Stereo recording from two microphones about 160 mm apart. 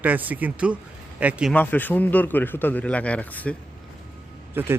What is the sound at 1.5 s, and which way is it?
A man's voice, 10° left (ahead or behind).